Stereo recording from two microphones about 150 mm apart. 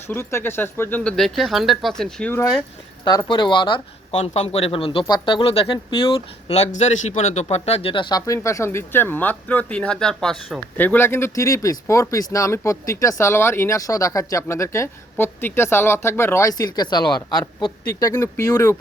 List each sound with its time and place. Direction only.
0.1 s speech: 15° left (ahead or behind)
2.3 s speech: 15° left (ahead or behind)
3.0 s speech: 30° left (ahead or behind)
4.2 s speech: 45° left (ahead or behind)
8.3 s speech: 20° left (ahead or behind)